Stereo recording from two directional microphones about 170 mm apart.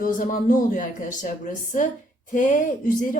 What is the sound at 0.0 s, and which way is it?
Speech, 50° left (ahead or behind).